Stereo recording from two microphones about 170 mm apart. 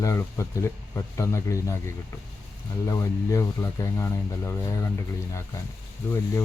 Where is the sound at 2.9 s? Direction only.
20° left (ahead or behind).